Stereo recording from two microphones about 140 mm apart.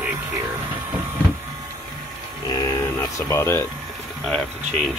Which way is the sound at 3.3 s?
20° left (ahead or behind).